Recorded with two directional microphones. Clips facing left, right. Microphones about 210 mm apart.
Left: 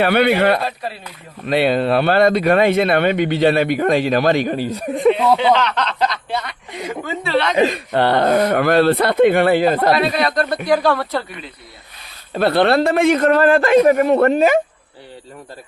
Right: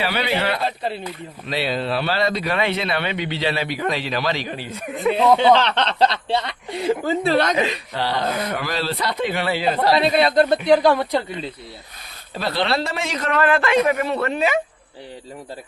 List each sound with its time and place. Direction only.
0.0 s speech: 55° left (ahead or behind); by 5.1 s 35° left (ahead or behind)
5.4 s speech: 30° right (ahead or behind)
7.6 s speech: 55° left (ahead or behind)
9.9 s speech: 25° right (ahead or behind)
12.3 s speech: 60° left (ahead or behind)
13.3 s speech: 35° left (ahead or behind)